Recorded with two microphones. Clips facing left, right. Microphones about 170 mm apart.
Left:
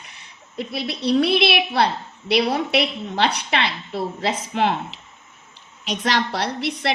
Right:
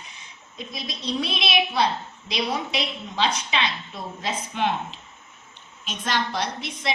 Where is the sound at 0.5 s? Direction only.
70° left (ahead or behind).